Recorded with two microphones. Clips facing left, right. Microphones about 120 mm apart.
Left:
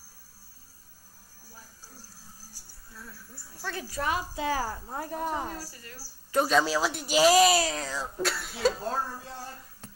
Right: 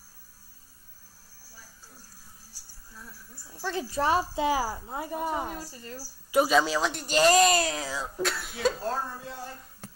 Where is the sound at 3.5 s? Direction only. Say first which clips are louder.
Right 5 dB; 20° right (ahead or behind).